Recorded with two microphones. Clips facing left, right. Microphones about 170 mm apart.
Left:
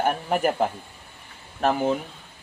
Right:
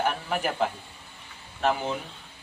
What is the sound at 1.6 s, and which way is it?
Speech, 45° left (ahead or behind).